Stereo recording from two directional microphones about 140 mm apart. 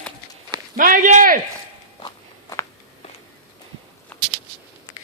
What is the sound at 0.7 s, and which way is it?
Speech, 75° right (ahead or behind).